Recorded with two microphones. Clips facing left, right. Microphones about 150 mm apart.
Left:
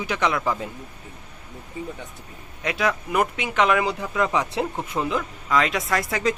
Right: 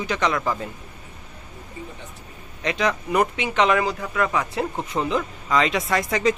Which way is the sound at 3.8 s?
15° left (ahead or behind).